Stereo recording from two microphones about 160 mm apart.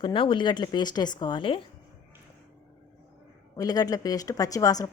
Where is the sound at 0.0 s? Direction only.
30° left (ahead or behind).